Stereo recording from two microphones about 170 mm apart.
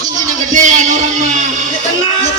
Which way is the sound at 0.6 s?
45° right (ahead or behind).